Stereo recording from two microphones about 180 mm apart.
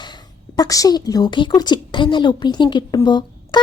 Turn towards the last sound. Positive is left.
turn(degrees=25)  # may be behind; listen again after turning